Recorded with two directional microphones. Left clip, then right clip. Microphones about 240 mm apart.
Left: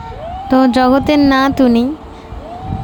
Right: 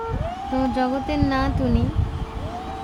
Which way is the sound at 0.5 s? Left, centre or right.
Left.